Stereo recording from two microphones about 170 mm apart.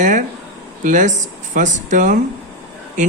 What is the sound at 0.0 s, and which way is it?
Speech, 50° right (ahead or behind).